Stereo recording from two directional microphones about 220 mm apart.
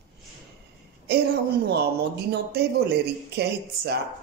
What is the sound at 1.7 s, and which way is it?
Speech, 45° right (ahead or behind).